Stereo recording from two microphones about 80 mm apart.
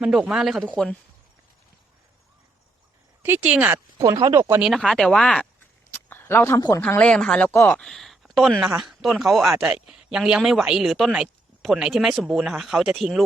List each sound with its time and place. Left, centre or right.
0.0 s speech: centre
3.4 s speech: centre
3.9 s speech: right
4.4 s speech: right
4.6 s speech: centre
5.9 s a sound: left
6.6 s speech: left
7.0 s speech: centre